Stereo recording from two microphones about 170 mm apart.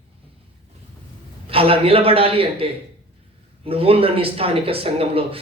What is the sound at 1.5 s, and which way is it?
Speech, 35° right (ahead or behind).